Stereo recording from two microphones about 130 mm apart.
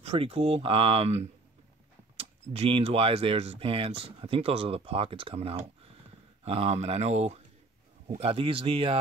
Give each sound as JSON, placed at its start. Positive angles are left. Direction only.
{"t": 0.0, "sound": "speech", "side_deg": -50}